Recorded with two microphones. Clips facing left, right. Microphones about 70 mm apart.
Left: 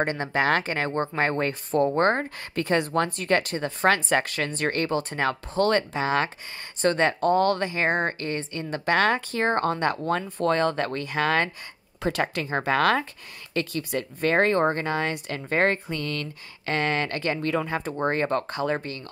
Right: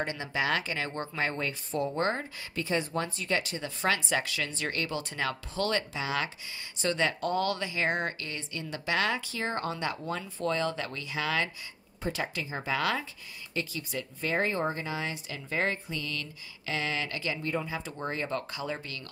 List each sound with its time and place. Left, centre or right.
0.0 s speech: left
12.0 s speech: left